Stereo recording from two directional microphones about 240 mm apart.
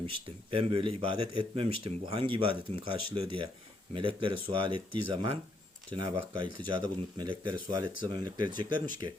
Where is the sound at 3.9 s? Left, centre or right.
Right.